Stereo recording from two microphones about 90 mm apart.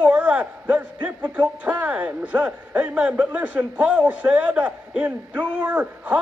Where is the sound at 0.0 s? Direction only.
15° right (ahead or behind).